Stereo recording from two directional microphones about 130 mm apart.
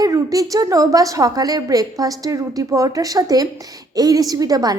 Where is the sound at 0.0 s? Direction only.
25° right (ahead or behind).